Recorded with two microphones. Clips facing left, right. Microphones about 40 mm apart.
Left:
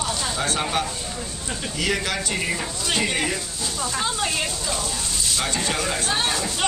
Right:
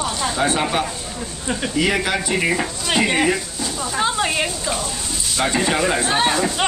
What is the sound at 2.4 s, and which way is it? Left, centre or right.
Speech, right.